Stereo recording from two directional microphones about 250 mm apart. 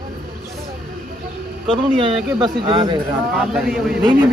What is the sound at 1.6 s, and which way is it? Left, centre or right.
Speech, right.